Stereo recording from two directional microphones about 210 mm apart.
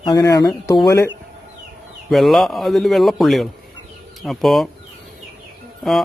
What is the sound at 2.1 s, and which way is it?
Speech, centre (ahead or behind).